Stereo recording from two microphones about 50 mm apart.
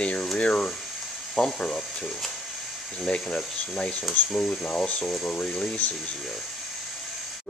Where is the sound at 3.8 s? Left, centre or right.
Centre.